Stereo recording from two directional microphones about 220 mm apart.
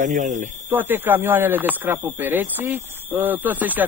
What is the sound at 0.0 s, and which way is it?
Speech, 35° right (ahead or behind).